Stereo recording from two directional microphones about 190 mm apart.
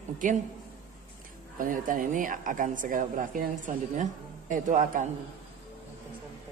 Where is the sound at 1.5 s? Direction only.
45° right (ahead or behind).